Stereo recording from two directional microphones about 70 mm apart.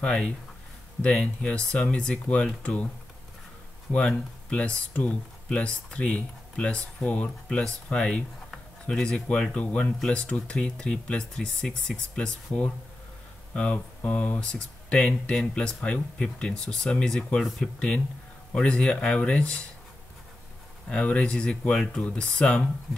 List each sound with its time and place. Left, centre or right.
0.0 s speech: centre
3.9 s speech: centre
20.9 s speech: centre